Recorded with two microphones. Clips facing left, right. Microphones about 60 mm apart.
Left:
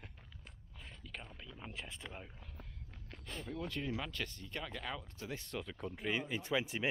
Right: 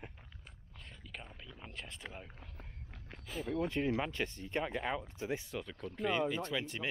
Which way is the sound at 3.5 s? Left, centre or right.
Right.